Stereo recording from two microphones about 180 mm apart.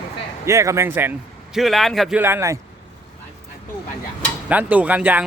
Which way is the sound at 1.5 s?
Centre (ahead or behind).